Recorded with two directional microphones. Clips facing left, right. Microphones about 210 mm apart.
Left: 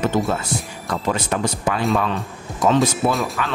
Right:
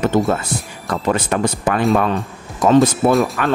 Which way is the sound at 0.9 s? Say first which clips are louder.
Right 4 dB; 55° right (ahead or behind).